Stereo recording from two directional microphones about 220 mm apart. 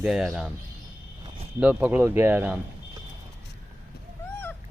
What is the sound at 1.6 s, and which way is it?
Speech, 5° right (ahead or behind).